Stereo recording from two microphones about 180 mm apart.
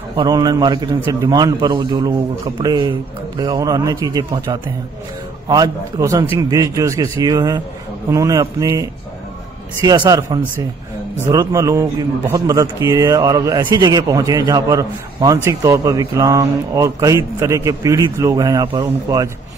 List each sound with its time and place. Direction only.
0.1 s a man's voice: 25° right (ahead or behind)